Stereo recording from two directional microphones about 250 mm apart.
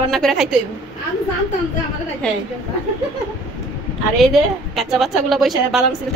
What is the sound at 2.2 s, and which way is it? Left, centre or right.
Speech, centre.